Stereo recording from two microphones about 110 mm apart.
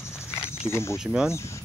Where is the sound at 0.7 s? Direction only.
25° left (ahead or behind).